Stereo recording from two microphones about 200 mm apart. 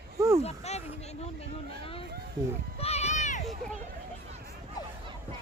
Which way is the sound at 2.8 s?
30° left (ahead or behind).